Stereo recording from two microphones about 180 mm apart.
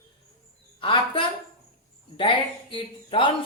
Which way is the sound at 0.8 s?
30° left (ahead or behind).